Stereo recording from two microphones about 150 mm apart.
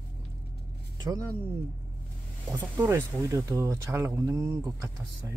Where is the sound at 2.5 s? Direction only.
15° right (ahead or behind).